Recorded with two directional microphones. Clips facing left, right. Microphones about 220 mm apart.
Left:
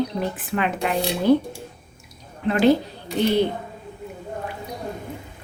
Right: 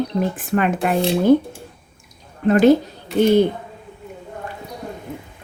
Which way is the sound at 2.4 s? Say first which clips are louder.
Right 7 dB; 45° right (ahead or behind).